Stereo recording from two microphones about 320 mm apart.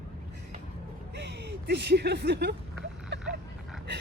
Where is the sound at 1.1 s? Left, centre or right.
Right.